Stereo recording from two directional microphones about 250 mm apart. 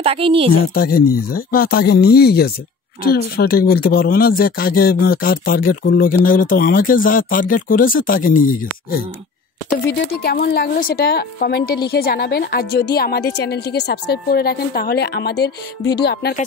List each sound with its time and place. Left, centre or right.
0.0 s a woman's voice: right
0.5 s a woman's voice: left
9.8 s a woman's voice: left